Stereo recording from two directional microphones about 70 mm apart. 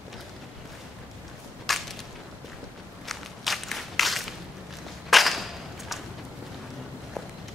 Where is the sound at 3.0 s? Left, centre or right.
Centre.